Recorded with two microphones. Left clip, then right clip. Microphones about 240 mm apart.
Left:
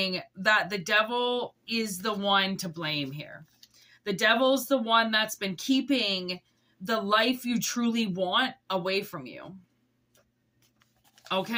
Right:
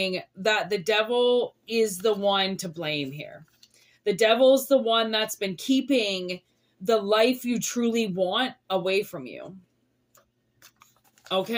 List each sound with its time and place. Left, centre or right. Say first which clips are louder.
0.0 s speech: right 1 dB; centre
11.3 s speech: right 3 dB; centre